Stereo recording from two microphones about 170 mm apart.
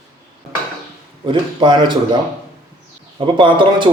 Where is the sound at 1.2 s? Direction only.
25° right (ahead or behind).